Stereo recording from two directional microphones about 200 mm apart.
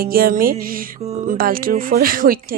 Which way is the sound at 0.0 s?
45° right (ahead or behind).